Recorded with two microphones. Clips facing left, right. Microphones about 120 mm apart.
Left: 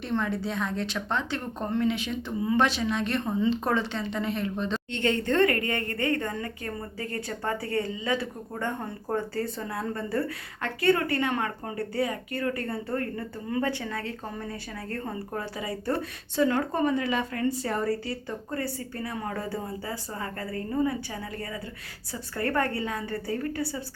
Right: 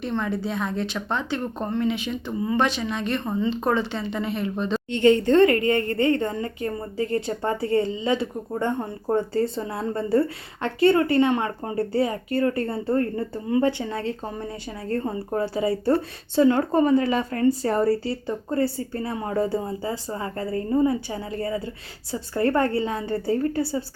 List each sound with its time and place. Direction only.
0.0 s speech: centre (ahead or behind); by 23.8 s 30° right (ahead or behind)